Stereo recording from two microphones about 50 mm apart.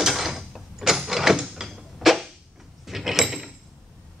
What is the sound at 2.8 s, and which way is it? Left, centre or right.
Door, centre.